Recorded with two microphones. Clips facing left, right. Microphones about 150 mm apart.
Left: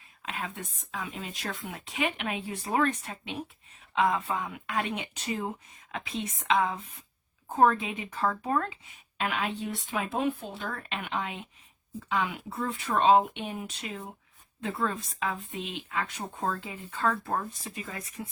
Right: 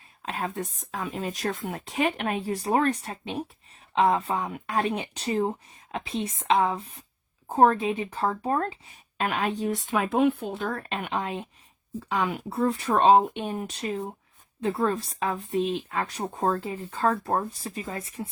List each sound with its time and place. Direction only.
0.3 s speech: 40° right (ahead or behind)
10.0 s speech: 60° right (ahead or behind)
10.6 s speech: 40° right (ahead or behind)